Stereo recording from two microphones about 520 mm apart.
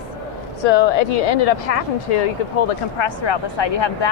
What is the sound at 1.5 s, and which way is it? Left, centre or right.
Speech, left.